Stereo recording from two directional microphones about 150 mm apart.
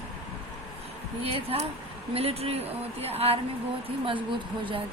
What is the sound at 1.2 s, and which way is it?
A woman's voice, 40° right (ahead or behind).